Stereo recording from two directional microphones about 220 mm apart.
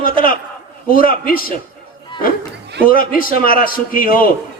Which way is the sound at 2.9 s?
40° left (ahead or behind).